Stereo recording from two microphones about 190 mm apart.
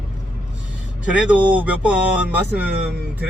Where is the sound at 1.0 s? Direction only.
5° right (ahead or behind).